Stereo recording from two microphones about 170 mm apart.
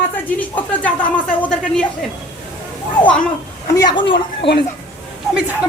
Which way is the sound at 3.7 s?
25° left (ahead or behind).